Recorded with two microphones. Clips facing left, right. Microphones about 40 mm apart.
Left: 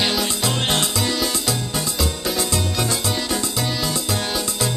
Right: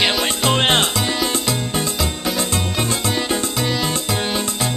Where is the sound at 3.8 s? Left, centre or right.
Right.